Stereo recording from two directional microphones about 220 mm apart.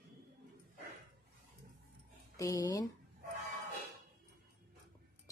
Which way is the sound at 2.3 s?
15° left (ahead or behind).